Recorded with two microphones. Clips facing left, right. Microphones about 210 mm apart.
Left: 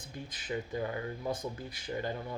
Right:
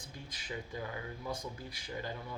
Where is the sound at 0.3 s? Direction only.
55° left (ahead or behind).